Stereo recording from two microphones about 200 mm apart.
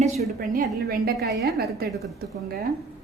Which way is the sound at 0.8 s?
50° right (ahead or behind).